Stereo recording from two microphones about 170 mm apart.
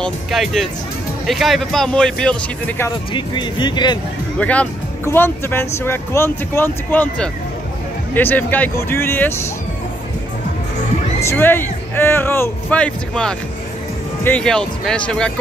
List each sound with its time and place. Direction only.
0.0 s speech: centre (ahead or behind)
3.1 s speech: 25° left (ahead or behind)
4.4 s speech: 10° left (ahead or behind)
11.2 s speech: 10° left (ahead or behind)